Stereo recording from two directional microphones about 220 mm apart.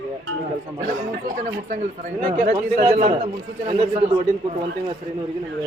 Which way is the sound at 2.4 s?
35° right (ahead or behind).